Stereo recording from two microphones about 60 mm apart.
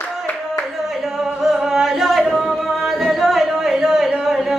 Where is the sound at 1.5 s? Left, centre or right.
Centre.